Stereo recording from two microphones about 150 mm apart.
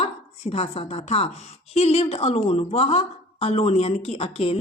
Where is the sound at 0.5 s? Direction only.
45° left (ahead or behind).